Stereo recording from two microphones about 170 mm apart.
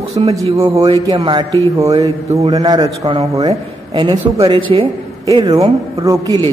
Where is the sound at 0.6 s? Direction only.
20° right (ahead or behind).